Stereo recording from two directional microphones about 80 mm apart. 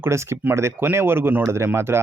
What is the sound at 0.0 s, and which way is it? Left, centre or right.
Speech, right.